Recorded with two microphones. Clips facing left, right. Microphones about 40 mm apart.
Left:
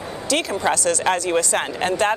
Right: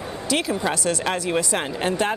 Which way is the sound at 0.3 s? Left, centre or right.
Centre.